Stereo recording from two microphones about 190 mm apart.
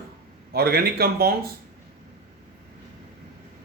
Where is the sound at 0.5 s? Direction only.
55° right (ahead or behind).